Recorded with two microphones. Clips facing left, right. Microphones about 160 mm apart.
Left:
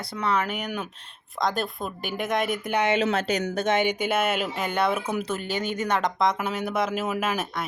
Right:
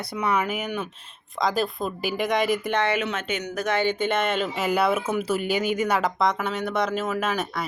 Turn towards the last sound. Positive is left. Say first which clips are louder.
# right 1 dB
turn(degrees=5)  # may be behind; listen again after turning